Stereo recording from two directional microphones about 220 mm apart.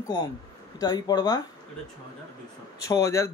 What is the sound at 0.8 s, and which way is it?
Speech, 15° left (ahead or behind).